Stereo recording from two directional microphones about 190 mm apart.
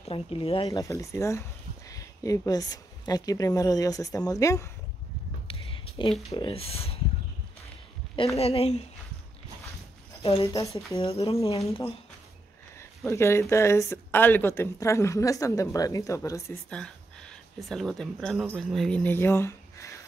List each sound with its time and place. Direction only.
0.1 s speech: 30° left (ahead or behind)
0.7 s speech: 15° left (ahead or behind)
5.5 s a sound: 30° left (ahead or behind)
6.3 s speech: 30° left (ahead or behind)
8.4 s speech: 30° left (ahead or behind)
10.4 s speech: 15° left (ahead or behind)
11.0 s speech: 30° left (ahead or behind)
13.0 s speech: 15° left (ahead or behind)
16.7 s speech: 5° left (ahead or behind)